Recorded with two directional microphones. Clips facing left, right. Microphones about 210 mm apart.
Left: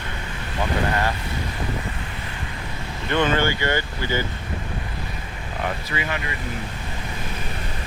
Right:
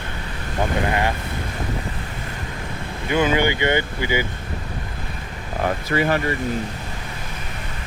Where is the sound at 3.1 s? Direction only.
10° right (ahead or behind).